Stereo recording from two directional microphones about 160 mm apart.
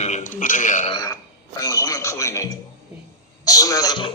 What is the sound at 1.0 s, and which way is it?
A man's voice, 20° left (ahead or behind).